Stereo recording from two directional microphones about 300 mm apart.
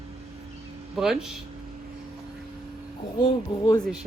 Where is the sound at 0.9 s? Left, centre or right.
Centre.